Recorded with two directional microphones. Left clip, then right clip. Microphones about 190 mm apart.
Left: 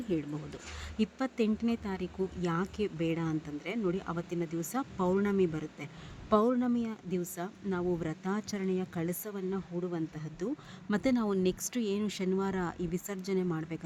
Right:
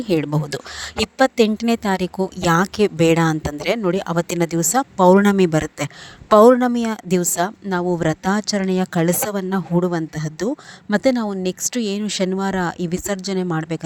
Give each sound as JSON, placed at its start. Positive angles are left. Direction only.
{"t": 0.1, "sound": "a woman's voice", "side_deg": -55}